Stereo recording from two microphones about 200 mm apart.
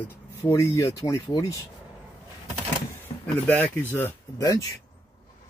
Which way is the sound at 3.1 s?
25° left (ahead or behind).